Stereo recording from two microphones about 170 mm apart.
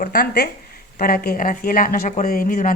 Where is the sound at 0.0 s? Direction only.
55° left (ahead or behind).